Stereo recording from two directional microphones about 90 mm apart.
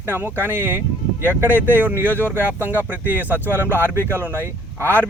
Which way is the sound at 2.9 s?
20° right (ahead or behind).